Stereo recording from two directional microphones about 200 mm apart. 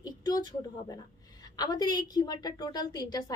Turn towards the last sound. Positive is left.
turn(degrees=20)  # may be behind; listen again after turning